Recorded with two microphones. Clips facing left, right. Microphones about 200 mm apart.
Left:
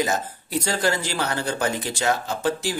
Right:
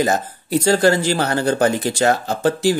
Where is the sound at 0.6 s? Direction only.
35° right (ahead or behind).